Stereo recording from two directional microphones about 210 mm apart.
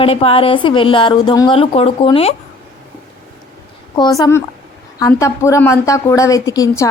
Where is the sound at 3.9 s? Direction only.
20° left (ahead or behind).